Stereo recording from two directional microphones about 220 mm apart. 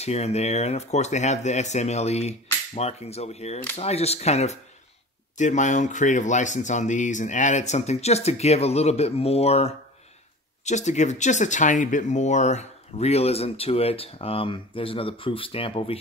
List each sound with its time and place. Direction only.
0.0 s speech: 30° left (ahead or behind)